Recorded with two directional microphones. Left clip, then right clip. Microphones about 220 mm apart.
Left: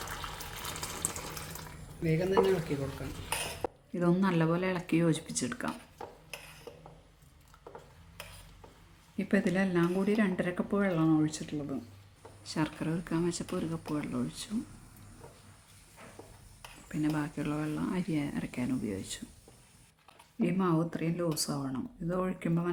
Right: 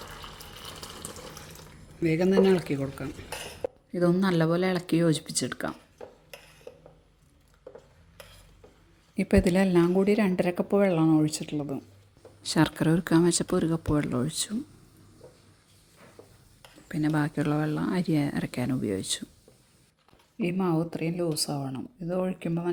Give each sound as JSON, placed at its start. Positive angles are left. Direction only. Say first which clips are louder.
{"t": 0.2, "sound": "water", "louder": "left 2 dB", "side_deg": 0}
{"t": 2.0, "sound": "speech", "louder": "right 5 dB", "side_deg": -45}
{"t": 3.9, "sound": "a woman's voice", "louder": "right 5 dB", "side_deg": -20}
{"t": 9.1, "sound": "a woman's voice", "louder": "right 7 dB", "side_deg": -30}
{"t": 12.4, "sound": "speech", "louder": "right 9 dB", "side_deg": -40}
{"t": 16.9, "sound": "a woman's voice", "louder": "right 5 dB", "side_deg": -30}
{"t": 20.4, "sound": "speech", "louder": "right 2 dB", "side_deg": -15}